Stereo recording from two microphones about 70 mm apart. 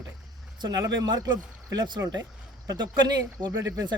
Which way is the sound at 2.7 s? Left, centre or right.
Right.